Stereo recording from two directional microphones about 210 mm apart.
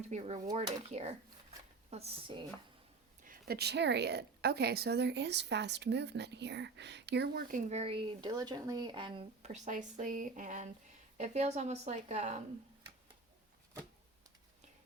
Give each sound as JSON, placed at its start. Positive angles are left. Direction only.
{"t": 0.1, "sound": "a woman's voice", "side_deg": -30}
{"t": 3.2, "sound": "a woman's voice", "side_deg": -45}